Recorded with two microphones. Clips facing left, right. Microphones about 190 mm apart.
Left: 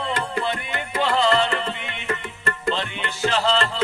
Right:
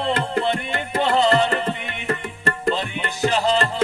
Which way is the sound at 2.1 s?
35° right (ahead or behind).